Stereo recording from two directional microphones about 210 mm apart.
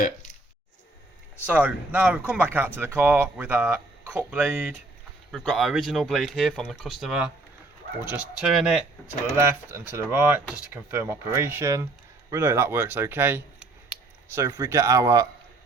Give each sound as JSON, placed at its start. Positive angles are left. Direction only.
{"t": 1.5, "sound": "speech", "side_deg": -5}